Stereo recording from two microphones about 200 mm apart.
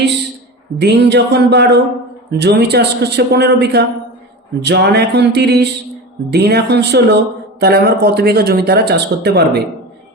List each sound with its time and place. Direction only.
0.8 s a man's voice: 55° right (ahead or behind)